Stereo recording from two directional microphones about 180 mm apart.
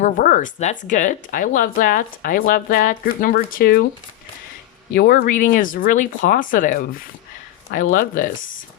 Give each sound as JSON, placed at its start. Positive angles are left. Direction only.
{"t": 0.0, "sound": "speech", "side_deg": 45}
{"t": 4.9, "sound": "speech", "side_deg": 55}